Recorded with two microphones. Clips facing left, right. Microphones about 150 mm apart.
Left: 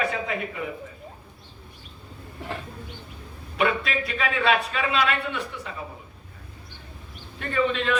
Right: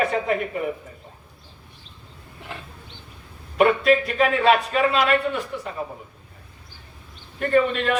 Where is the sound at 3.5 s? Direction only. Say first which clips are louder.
Right 8 dB; 45° right (ahead or behind).